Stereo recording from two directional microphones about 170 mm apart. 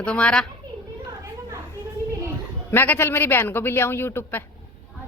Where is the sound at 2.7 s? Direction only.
10° left (ahead or behind).